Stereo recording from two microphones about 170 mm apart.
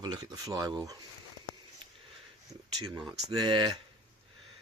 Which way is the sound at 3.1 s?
25° right (ahead or behind).